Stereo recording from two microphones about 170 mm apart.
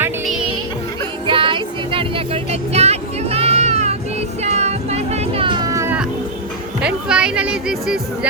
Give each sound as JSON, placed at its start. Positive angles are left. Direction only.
{"t": 1.3, "sound": "music", "side_deg": -30}
{"t": 6.8, "sound": "music", "side_deg": -5}